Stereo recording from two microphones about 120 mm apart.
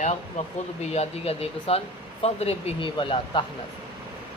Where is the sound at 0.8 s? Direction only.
60° left (ahead or behind).